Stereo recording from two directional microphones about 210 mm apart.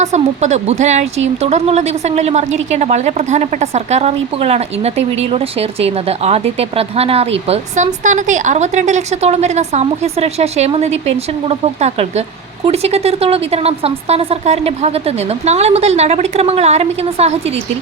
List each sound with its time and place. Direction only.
0.0 s a woman's voice: 35° right (ahead or behind)